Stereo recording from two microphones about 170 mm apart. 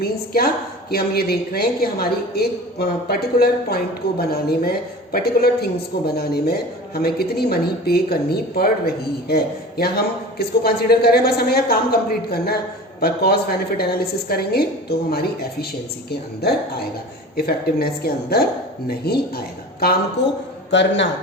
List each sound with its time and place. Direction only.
0.0 s a woman's voice: 65° left (ahead or behind)
17.3 s a woman's voice: 65° left (ahead or behind)
20.2 s a man's voice: 90° left